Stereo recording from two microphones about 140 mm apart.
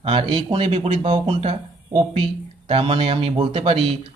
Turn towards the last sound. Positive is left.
turn(degrees=-45)  # may be behind; listen again after turning